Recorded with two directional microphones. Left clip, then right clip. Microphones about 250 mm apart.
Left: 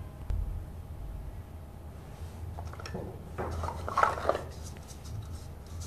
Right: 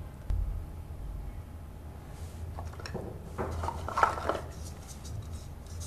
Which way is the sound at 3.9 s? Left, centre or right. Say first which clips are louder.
Left 3 dB; centre.